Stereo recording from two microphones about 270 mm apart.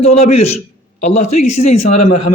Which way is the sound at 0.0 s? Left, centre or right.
Left.